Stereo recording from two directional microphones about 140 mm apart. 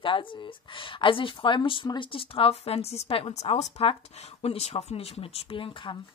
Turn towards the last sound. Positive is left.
turn(degrees=35)  # may be behind; listen again after turning